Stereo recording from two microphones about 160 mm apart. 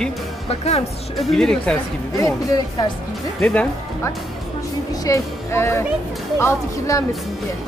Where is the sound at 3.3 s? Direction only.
10° left (ahead or behind).